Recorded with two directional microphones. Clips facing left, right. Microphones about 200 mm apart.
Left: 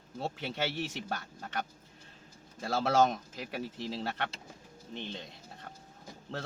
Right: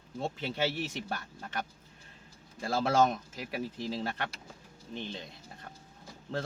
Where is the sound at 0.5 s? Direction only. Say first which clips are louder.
Right 2 dB; 10° right (ahead or behind).